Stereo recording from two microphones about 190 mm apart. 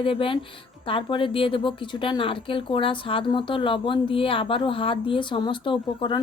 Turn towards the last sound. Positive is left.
turn(degrees=25)  # may be behind; listen again after turning